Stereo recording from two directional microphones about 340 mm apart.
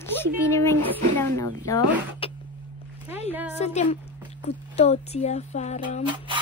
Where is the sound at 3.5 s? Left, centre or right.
Centre.